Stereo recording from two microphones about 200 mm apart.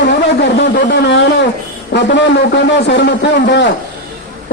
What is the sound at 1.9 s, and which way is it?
Speech, 60° left (ahead or behind).